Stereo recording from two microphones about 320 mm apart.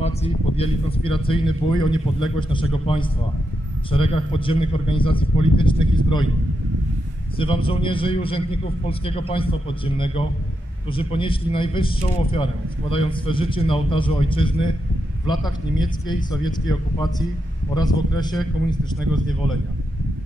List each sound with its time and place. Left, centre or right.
0.0 s a man's voice: centre
7.3 s a man's voice: centre
17.7 s a man's voice: centre